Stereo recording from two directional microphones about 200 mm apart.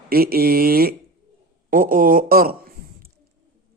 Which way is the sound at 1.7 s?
45° right (ahead or behind).